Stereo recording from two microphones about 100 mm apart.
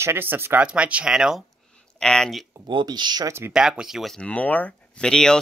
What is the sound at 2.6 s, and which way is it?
Speech, 50° right (ahead or behind).